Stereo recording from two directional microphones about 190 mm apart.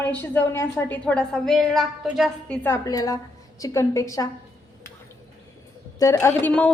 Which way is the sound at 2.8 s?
20° left (ahead or behind).